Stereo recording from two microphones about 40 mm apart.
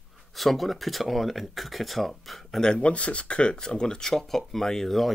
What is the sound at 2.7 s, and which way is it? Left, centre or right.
Speech, left.